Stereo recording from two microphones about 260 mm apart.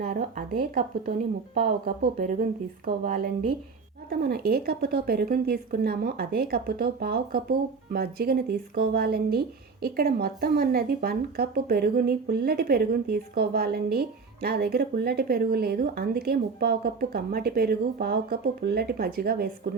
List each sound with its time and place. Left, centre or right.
0.0 s speech: right